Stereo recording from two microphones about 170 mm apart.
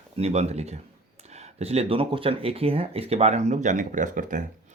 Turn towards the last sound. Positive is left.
turn(degrees=-45)  # may be behind; listen again after turning